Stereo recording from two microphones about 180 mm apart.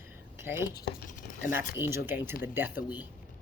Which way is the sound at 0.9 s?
50° left (ahead or behind).